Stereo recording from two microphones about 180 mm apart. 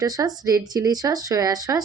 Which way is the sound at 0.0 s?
20° right (ahead or behind).